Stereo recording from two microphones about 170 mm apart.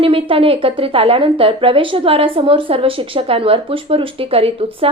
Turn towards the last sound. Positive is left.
turn(degrees=-35)  # may be behind; listen again after turning